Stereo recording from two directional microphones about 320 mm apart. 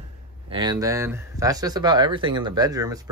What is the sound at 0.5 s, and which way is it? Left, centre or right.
Speech, centre.